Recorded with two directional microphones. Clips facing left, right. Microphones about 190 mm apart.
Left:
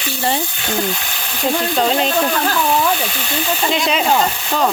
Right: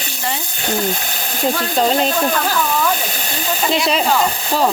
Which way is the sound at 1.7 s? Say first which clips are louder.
Right 1 dB; centre (ahead or behind).